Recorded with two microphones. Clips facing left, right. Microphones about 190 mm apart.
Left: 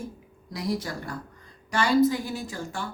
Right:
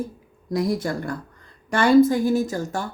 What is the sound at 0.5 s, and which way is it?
Speech, 50° right (ahead or behind).